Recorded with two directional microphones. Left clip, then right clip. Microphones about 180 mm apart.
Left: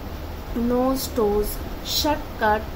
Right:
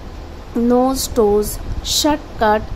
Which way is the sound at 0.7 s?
55° right (ahead or behind).